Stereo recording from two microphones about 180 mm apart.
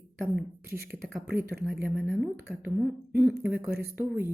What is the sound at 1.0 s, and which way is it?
Speech, centre (ahead or behind).